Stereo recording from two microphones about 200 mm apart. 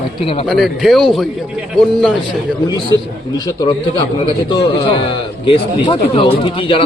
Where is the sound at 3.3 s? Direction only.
20° left (ahead or behind).